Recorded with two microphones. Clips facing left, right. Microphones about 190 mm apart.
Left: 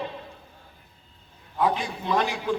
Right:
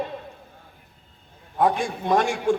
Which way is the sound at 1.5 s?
45° right (ahead or behind).